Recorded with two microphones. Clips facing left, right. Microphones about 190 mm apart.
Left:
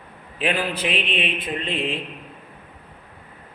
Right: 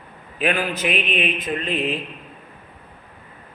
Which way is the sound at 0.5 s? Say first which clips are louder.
Right 1 dB; 30° left (ahead or behind).